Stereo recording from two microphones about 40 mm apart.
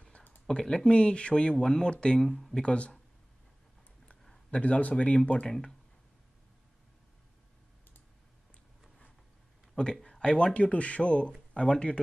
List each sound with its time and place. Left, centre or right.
0.5 s speech: centre
2.1 s speech: centre
2.5 s speech: left
4.5 s speech: left
5.5 s speech: centre
9.8 s speech: left